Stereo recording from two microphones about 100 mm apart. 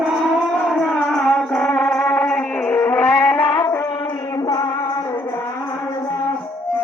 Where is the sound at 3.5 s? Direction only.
30° left (ahead or behind).